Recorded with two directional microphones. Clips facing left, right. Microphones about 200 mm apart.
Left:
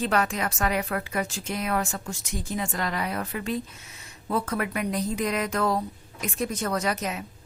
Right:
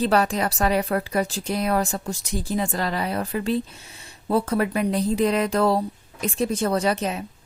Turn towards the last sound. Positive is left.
turn(degrees=-30)  # may be behind; listen again after turning